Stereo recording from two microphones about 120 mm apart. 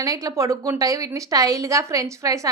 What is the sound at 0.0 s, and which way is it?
A woman's voice, 30° right (ahead or behind).